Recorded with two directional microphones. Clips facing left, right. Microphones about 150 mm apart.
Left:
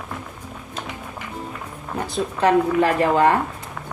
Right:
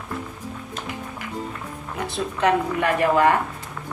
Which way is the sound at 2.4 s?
30° left (ahead or behind).